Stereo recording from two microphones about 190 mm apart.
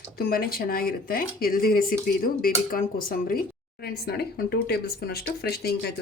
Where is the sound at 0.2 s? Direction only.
50° left (ahead or behind).